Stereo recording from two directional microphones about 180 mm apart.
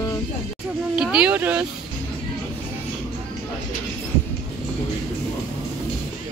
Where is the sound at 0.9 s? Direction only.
5° right (ahead or behind).